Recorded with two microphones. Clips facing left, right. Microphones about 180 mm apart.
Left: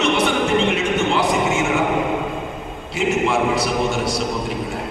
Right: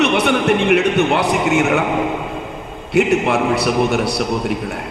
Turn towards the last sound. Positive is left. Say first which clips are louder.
# right 4 dB
turn(degrees=-60)  # may be behind; listen again after turning